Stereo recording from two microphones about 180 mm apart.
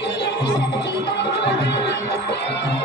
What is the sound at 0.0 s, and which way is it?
Music, 75° left (ahead or behind).